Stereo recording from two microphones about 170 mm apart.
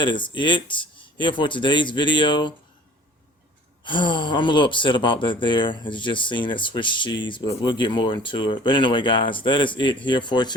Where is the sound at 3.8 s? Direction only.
30° left (ahead or behind).